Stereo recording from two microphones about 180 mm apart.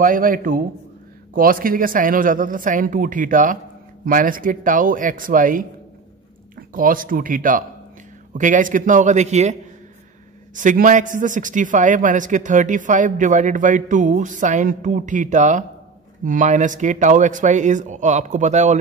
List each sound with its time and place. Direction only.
0.0 s a man's voice: 50° right (ahead or behind)
6.7 s a man's voice: 50° right (ahead or behind)